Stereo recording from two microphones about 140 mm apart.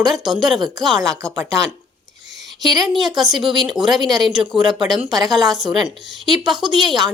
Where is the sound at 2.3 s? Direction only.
Centre (ahead or behind).